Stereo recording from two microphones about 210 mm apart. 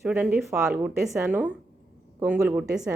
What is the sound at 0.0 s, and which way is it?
A woman's voice, 5° right (ahead or behind).